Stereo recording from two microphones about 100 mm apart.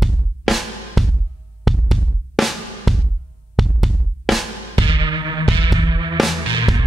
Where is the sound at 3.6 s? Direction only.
Centre (ahead or behind).